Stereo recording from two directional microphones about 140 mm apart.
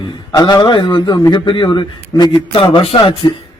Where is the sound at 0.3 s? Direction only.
30° left (ahead or behind).